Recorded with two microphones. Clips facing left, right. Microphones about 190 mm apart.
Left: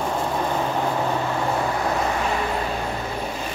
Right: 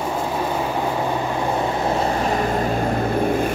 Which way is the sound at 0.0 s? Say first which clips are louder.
Right 1 dB; 5° right (ahead or behind).